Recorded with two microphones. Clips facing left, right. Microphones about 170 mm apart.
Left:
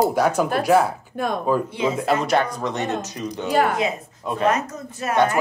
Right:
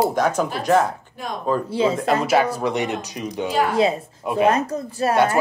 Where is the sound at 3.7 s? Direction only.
30° right (ahead or behind).